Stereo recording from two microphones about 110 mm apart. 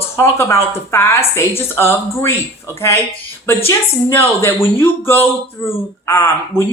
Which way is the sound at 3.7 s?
20° left (ahead or behind).